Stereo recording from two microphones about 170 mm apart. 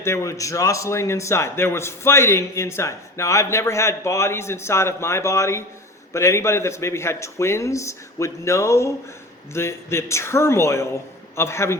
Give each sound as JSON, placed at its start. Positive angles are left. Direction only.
{"t": 0.0, "sound": "a man's voice", "side_deg": 15}